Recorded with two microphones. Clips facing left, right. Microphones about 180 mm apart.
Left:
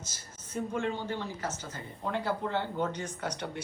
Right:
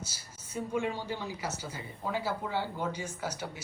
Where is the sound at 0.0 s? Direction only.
10° right (ahead or behind).